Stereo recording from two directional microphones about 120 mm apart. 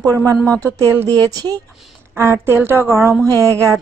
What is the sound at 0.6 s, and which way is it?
Speech, 20° right (ahead or behind).